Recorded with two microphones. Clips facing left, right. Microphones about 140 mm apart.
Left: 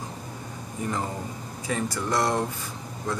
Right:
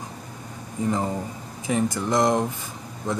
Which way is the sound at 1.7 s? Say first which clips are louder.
Right 4 dB; 20° right (ahead or behind).